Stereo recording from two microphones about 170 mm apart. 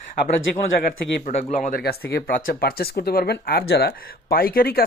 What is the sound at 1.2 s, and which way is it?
Speech, 45° left (ahead or behind).